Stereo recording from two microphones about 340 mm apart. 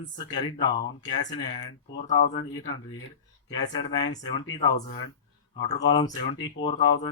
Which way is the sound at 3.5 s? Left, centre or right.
Centre.